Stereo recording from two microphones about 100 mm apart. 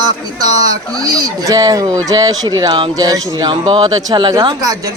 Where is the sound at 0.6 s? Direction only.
40° right (ahead or behind).